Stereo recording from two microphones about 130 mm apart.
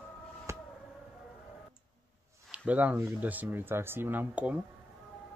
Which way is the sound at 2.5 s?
10° right (ahead or behind).